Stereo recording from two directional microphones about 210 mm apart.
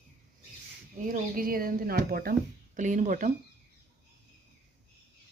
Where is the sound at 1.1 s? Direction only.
45° right (ahead or behind).